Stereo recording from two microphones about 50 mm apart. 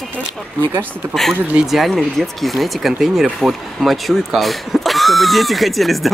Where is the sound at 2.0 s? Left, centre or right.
Centre.